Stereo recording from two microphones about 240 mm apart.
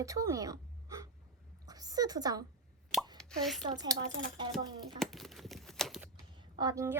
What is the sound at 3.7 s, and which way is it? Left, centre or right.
Speech, centre.